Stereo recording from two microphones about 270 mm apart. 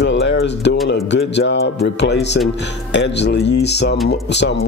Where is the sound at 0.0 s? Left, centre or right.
Left.